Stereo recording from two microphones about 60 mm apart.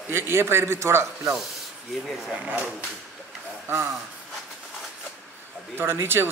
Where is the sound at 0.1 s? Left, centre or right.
Right.